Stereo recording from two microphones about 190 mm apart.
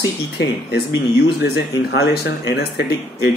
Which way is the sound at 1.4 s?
60° left (ahead or behind).